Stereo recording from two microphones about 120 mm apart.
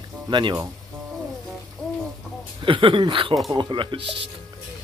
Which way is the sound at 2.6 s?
45° right (ahead or behind).